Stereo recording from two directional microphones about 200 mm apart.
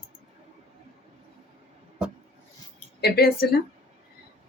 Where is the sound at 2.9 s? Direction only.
50° left (ahead or behind).